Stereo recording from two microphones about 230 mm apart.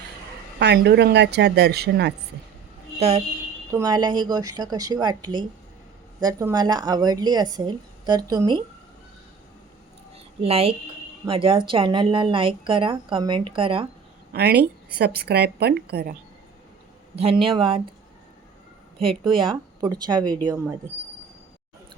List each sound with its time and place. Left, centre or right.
0.6 s speech: right
3.0 s a woman's voice: right
10.4 s a woman's voice: right
14.3 s speech: right
17.2 s a woman's voice: right
19.3 s a woman's voice: right